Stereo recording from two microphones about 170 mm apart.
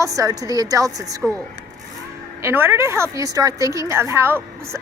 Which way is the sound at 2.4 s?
15° right (ahead or behind).